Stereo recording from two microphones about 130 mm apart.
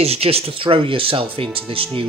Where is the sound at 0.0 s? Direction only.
50° right (ahead or behind).